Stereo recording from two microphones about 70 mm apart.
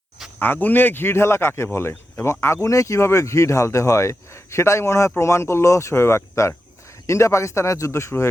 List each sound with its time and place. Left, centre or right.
0.3 s speech: left